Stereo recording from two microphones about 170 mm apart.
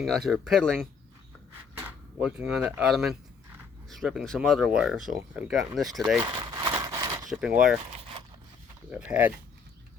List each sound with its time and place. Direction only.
0.0 s speech: centre (ahead or behind)
2.1 s speech: 5° right (ahead or behind)
6.2 s a sound: 25° right (ahead or behind)
7.3 s speech: 5° right (ahead or behind)
8.9 s speech: 5° right (ahead or behind)